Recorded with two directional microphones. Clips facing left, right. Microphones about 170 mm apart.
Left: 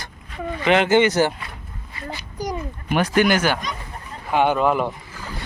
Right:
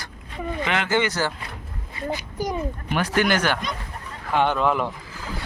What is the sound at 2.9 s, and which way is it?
Speech, 15° left (ahead or behind).